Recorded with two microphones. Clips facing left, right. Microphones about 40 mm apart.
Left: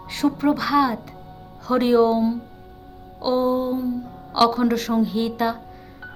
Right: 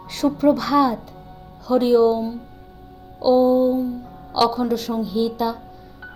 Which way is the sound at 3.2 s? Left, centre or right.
Left.